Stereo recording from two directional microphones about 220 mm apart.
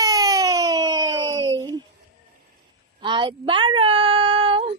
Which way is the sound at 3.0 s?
20° right (ahead or behind).